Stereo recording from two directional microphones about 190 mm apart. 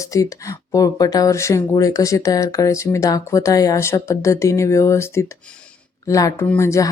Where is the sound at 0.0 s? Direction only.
15° left (ahead or behind).